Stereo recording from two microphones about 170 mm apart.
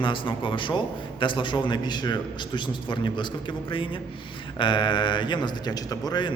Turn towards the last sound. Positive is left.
turn(degrees=25)  # may be behind; listen again after turning